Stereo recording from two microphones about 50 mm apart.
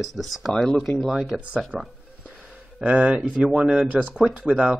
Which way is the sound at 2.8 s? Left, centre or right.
Right.